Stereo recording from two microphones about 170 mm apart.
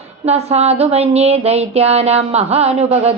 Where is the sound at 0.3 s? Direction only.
40° right (ahead or behind).